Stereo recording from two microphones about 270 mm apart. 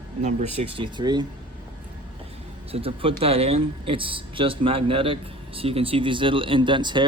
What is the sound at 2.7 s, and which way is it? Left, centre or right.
Speech, right.